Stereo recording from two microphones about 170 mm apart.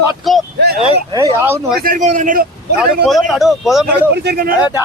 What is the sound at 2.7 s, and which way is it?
Speech, centre (ahead or behind).